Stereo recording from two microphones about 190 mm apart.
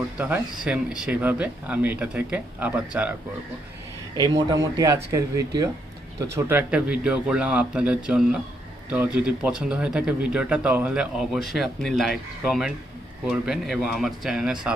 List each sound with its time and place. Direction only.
0.2 s speech: 5° right (ahead or behind)
4.2 s speech: 15° right (ahead or behind)